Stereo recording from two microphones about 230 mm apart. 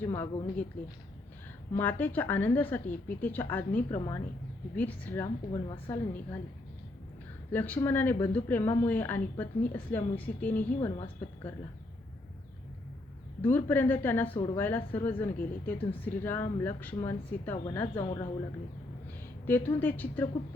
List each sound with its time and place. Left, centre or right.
0.0 s speech: centre
1.7 s speech: centre
5.5 s a woman's voice: centre
7.5 s speech: centre
10.8 s a woman's voice: centre
13.4 s speech: centre
19.5 s speech: centre